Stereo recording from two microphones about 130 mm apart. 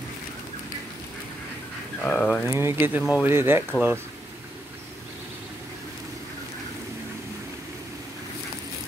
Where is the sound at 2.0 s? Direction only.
5° left (ahead or behind).